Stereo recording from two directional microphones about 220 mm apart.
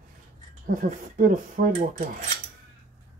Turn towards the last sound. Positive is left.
turn(degrees=-35)  # may be behind; listen again after turning